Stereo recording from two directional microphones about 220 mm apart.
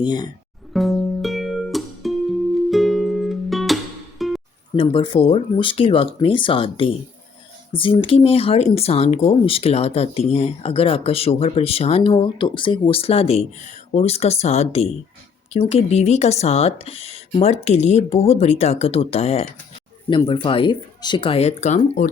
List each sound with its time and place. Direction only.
0.0 s speech: 20° left (ahead or behind)
0.7 s music: centre (ahead or behind)
4.8 s speech: 25° left (ahead or behind)